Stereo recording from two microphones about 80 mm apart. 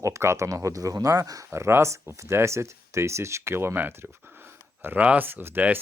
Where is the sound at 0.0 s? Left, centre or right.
Right.